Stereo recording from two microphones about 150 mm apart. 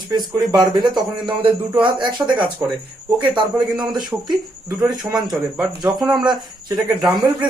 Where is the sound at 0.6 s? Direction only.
30° right (ahead or behind).